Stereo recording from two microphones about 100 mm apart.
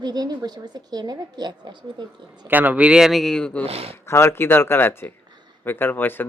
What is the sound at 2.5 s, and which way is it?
Speech, 15° right (ahead or behind).